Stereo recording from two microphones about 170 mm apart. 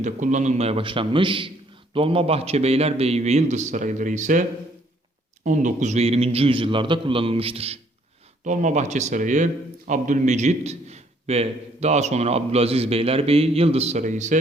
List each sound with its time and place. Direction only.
0.0 s a man's voice: 45° right (ahead or behind)